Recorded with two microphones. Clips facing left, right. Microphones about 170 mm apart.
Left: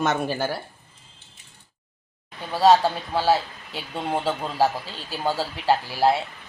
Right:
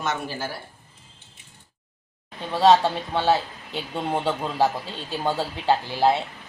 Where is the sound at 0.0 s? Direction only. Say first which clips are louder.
Left 5 dB; 55° left (ahead or behind).